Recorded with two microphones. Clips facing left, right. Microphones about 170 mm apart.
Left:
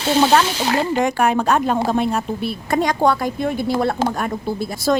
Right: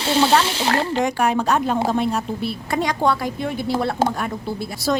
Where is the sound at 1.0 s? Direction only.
55° left (ahead or behind).